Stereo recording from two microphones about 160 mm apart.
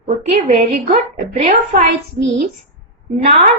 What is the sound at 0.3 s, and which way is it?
Speech, 40° right (ahead or behind).